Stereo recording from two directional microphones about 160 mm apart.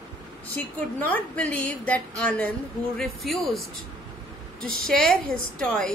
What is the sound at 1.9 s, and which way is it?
A woman's voice, 10° left (ahead or behind).